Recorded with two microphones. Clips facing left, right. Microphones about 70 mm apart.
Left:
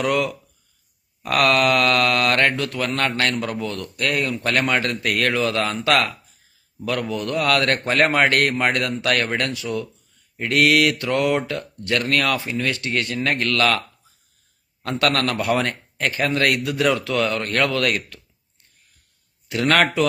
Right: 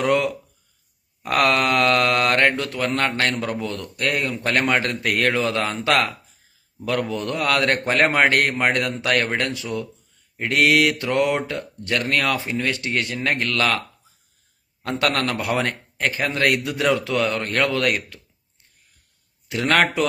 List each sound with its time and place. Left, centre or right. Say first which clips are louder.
0.0 s speech: right 1 dB; right
14.9 s speech: left 1 dB; right
19.5 s speech: left 1 dB; centre